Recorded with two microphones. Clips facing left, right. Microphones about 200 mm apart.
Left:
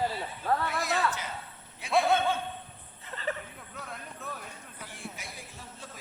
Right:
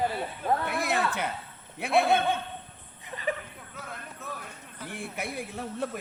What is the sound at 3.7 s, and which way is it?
Clip-clop, centre (ahead or behind).